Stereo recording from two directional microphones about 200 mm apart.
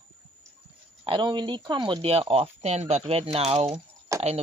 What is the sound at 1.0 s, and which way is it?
Speech, 25° right (ahead or behind).